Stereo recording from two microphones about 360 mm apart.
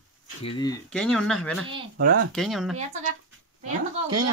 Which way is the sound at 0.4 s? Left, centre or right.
Centre.